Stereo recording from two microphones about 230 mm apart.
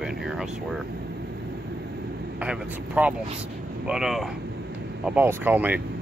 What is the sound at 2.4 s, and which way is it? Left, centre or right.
Speech, centre.